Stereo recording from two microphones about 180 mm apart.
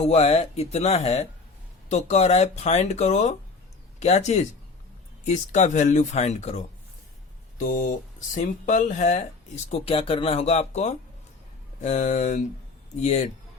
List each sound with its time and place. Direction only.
0.0 s speech: 35° left (ahead or behind)